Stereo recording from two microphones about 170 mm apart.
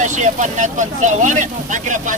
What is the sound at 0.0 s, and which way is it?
Speech, 45° right (ahead or behind).